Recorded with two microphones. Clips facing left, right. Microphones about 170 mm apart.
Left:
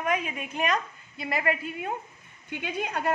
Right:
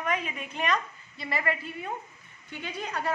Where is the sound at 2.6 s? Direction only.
50° left (ahead or behind).